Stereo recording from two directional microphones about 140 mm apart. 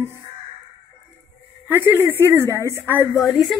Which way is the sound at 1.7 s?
15° right (ahead or behind).